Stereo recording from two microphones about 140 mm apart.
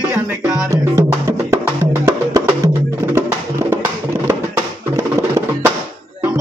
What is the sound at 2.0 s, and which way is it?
Music, 20° right (ahead or behind).